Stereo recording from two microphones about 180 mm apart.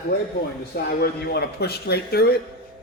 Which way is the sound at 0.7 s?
60° left (ahead or behind).